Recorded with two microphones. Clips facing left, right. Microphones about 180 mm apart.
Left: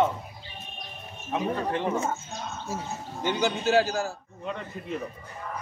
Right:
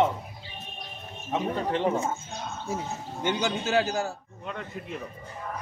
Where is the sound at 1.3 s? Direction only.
25° right (ahead or behind).